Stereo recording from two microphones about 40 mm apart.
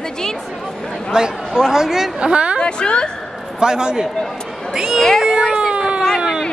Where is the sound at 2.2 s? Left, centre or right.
Right.